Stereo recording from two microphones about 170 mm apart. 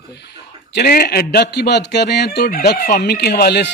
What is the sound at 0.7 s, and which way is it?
Fowl, 60° left (ahead or behind).